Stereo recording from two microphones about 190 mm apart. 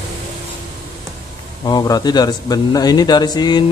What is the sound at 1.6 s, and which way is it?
Speech, 20° left (ahead or behind).